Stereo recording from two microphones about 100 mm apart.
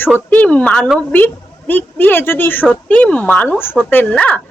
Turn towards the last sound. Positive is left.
turn(degrees=15)  # may be behind; listen again after turning